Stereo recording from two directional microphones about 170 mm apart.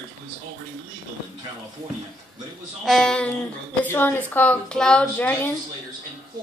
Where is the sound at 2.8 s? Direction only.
Centre (ahead or behind).